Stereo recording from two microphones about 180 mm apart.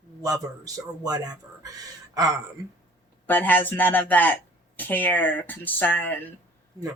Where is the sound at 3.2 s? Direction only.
10° left (ahead or behind).